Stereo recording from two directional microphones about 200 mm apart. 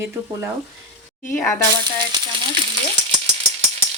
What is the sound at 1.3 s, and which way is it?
Speech, 15° left (ahead or behind).